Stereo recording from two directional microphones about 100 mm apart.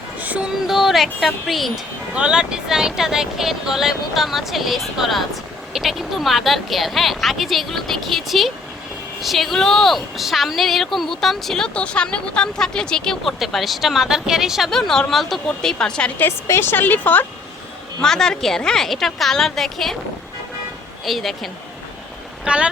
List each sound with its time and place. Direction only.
0.2 s a sound: 15° right (ahead or behind)
0.7 s a woman's voice: centre (ahead or behind); by 17.2 s 20° left (ahead or behind)
18.0 s a woman's voice: 5° left (ahead or behind)
21.0 s a woman's voice: centre (ahead or behind)
22.4 s speech: 10° right (ahead or behind)